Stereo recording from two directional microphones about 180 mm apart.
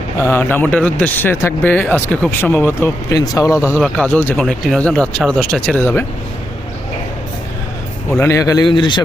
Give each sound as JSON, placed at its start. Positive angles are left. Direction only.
{"t": 0.2, "sound": "speech", "side_deg": 15}
{"t": 3.8, "sound": "speech", "side_deg": 5}
{"t": 8.2, "sound": "speech", "side_deg": 15}